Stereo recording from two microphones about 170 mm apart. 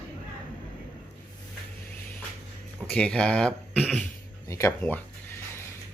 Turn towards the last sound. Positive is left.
turn(degrees=10)  # may be behind; listen again after turning